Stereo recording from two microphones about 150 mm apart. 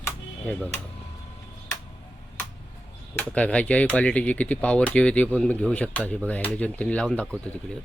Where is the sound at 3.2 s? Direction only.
10° left (ahead or behind).